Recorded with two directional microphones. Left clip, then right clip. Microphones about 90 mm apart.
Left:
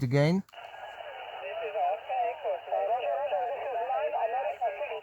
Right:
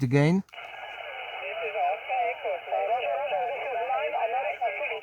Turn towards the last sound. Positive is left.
turn(degrees=-35)  # may be behind; listen again after turning